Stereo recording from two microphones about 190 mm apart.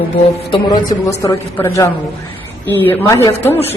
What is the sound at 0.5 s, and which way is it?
Speech, 20° left (ahead or behind).